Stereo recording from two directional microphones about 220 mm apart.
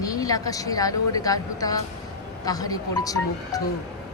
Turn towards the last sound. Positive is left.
turn(degrees=15)  # may be behind; listen again after turning